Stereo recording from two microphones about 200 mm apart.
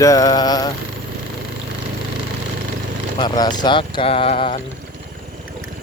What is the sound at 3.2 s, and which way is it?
Speech, 20° left (ahead or behind).